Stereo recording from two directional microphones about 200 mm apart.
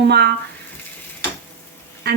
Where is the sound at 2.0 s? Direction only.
55° right (ahead or behind).